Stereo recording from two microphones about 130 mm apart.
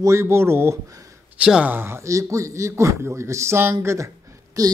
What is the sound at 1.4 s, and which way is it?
A man's voice, 10° right (ahead or behind).